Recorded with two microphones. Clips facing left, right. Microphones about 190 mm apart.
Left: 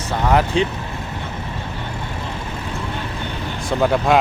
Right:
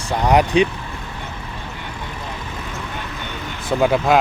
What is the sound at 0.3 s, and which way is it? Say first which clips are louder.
Speech: right 3 dB; 15° right (ahead or behind).